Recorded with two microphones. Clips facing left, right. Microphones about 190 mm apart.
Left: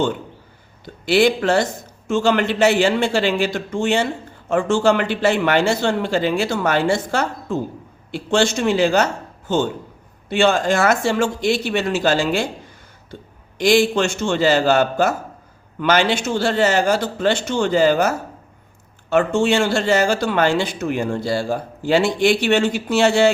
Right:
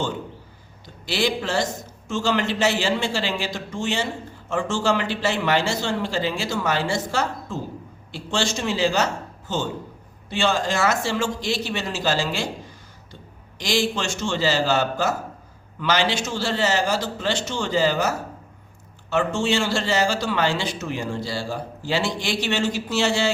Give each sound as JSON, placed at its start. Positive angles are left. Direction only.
{"t": 1.0, "sound": "speech", "side_deg": 60}
{"t": 10.2, "sound": "speech", "side_deg": 60}
{"t": 13.6, "sound": "a man's voice", "side_deg": 55}
{"t": 19.1, "sound": "speech", "side_deg": 55}